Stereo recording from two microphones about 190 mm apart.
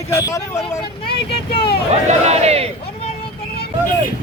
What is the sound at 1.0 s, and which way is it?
Speech, 60° left (ahead or behind).